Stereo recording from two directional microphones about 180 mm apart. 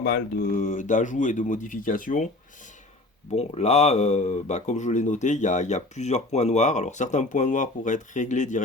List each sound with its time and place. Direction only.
0.0 s speech: 55° left (ahead or behind)
3.3 s speech: 35° left (ahead or behind)